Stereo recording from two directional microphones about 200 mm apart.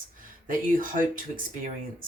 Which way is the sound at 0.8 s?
40° right (ahead or behind).